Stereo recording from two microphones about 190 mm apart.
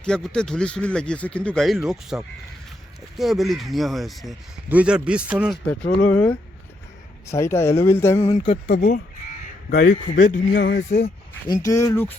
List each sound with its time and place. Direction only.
0.0 s speech: 5° left (ahead or behind)
6.1 s speech: 5° left (ahead or behind)
8.6 s speech: 50° left (ahead or behind)
10.5 s speech: 70° left (ahead or behind)
10.8 s speech: 40° left (ahead or behind)
11.4 s speech: 20° left (ahead or behind)